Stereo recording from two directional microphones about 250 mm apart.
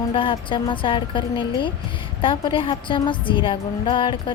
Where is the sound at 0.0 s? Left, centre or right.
Centre.